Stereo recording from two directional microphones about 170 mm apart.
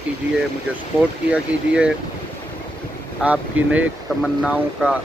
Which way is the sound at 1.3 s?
5° right (ahead or behind).